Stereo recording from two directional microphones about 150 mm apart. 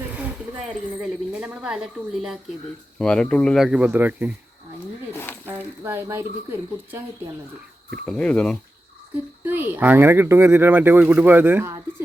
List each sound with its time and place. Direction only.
0.1 s a sound: 10° right (ahead or behind)
1.4 s speech: 5° right (ahead or behind)
5.5 s speech: 15° right (ahead or behind)
8.0 s speech: 5° left (ahead or behind)
9.4 s speech: 15° right (ahead or behind)